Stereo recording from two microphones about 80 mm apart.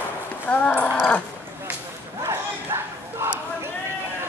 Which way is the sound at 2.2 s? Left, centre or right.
Right.